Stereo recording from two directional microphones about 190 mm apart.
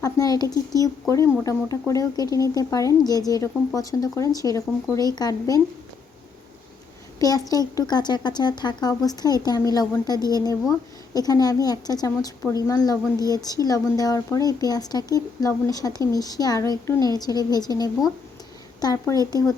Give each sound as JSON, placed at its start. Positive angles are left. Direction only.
{"t": 0.0, "sound": "speech", "side_deg": 20}
{"t": 0.4, "sound": "speech", "side_deg": -15}
{"t": 0.8, "sound": "speech", "side_deg": 15}
{"t": 7.2, "sound": "speech", "side_deg": 20}